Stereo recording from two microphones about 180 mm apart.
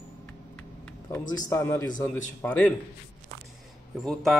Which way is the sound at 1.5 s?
15° left (ahead or behind).